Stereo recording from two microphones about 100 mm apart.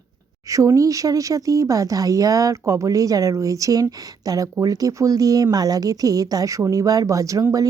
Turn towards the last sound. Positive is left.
turn(degrees=-35)  # may be behind; listen again after turning